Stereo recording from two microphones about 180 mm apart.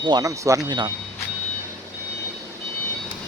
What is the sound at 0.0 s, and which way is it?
Speech, 20° right (ahead or behind).